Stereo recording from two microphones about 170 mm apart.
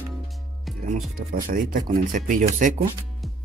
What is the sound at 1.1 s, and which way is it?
Speech, 55° right (ahead or behind).